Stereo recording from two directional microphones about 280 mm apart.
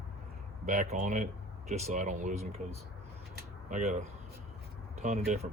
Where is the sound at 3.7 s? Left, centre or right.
Right.